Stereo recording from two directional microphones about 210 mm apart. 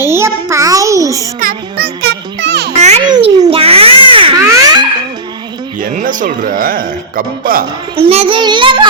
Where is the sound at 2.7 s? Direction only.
30° right (ahead or behind).